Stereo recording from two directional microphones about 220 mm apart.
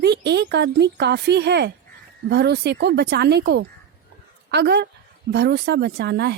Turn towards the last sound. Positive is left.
turn(degrees=-50)  # may be behind; listen again after turning